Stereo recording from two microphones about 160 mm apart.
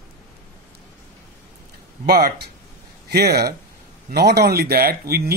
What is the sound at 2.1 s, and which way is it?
Speech, 85° right.